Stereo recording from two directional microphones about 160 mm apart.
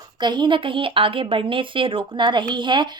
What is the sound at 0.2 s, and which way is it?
A woman's voice, 30° right (ahead or behind).